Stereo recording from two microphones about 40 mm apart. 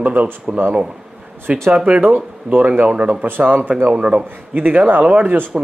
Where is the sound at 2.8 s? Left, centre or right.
Right.